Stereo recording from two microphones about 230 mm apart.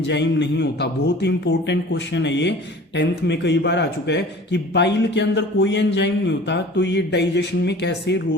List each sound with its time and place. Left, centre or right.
0.1 s a man's voice: left